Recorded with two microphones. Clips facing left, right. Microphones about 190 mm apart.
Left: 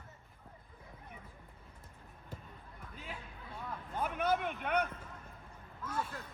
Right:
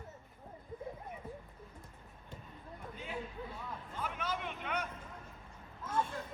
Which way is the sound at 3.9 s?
55° left (ahead or behind).